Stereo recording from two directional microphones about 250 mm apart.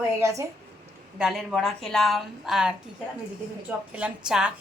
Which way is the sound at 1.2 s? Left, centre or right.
Centre.